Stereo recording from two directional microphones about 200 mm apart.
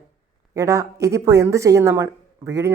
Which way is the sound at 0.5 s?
15° right (ahead or behind).